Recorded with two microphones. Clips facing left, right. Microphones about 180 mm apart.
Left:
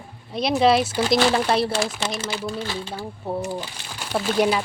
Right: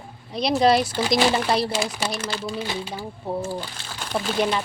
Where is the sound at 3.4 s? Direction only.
10° left (ahead or behind).